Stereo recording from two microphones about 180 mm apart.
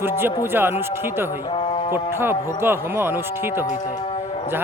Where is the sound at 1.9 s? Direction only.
15° right (ahead or behind).